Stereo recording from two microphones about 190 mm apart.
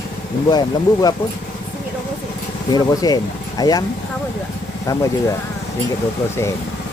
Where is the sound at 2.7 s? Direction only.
20° left (ahead or behind).